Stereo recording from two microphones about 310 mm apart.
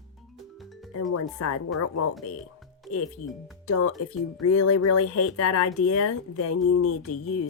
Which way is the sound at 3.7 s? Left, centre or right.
Left.